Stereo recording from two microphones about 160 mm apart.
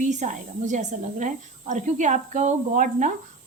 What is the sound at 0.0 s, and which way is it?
A woman's voice, 50° right (ahead or behind).